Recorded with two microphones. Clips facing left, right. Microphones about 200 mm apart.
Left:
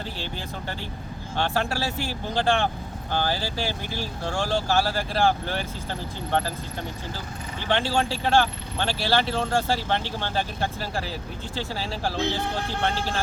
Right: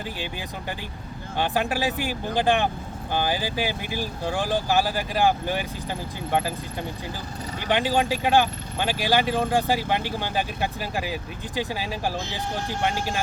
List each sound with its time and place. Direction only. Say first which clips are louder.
1.4 s speech: right 2 dB; 15° right (ahead or behind)
7.7 s speech: right 2 dB; 15° right (ahead or behind)